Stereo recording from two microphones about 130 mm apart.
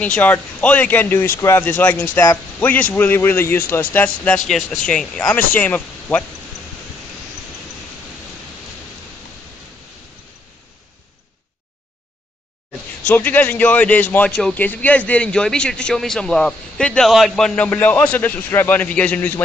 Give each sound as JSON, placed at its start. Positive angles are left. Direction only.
{"t": 0.0, "sound": "a man's voice", "side_deg": 10}
{"t": 4.5, "sound": "a man's voice", "side_deg": 0}
{"t": 13.0, "sound": "a man's voice", "side_deg": 15}